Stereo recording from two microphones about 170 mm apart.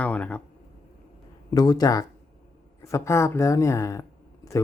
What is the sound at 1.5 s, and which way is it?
Speech, 20° left (ahead or behind).